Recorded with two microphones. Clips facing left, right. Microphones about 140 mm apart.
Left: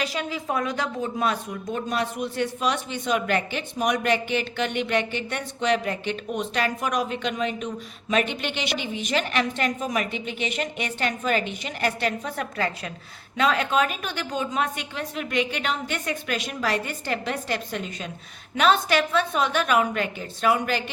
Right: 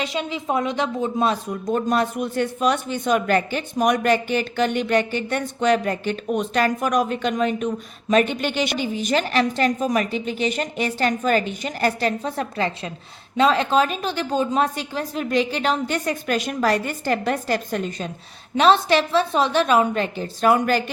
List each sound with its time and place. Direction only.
0.0 s a woman's voice: 25° right (ahead or behind)
1.6 s a woman's voice: 45° right (ahead or behind)
18.5 s a woman's voice: 30° right (ahead or behind)
20.5 s speech: 45° right (ahead or behind)